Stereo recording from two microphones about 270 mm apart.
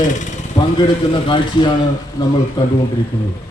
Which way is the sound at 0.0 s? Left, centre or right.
Left.